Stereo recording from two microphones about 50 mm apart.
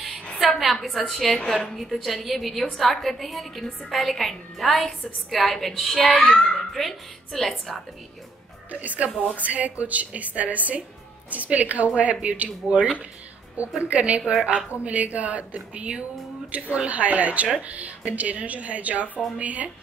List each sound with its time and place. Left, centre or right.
0.0 s a sound: centre
0.9 s a woman's voice: centre
8.8 s a woman's voice: right